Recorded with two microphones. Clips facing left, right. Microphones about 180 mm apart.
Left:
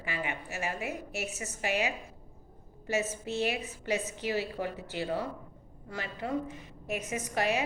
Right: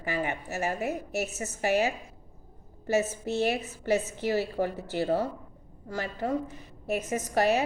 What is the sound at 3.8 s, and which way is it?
A woman's voice, 40° right (ahead or behind).